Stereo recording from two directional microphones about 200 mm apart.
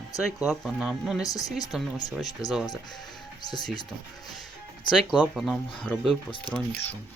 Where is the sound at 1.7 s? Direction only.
5° right (ahead or behind).